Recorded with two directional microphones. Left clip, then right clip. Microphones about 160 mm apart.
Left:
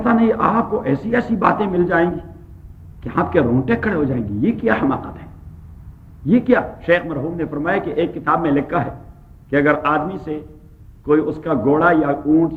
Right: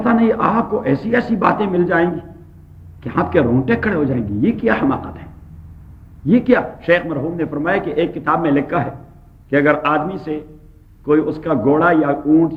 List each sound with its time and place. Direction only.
0.0 s a man's voice: 45° right (ahead or behind)